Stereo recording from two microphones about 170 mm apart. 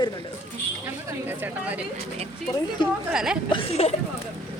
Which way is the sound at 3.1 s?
5° right (ahead or behind).